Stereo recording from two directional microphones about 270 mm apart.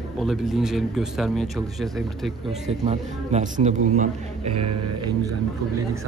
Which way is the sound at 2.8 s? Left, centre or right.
Right.